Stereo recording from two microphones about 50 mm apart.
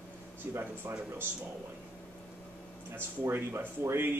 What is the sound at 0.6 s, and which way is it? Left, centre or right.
Speech, right.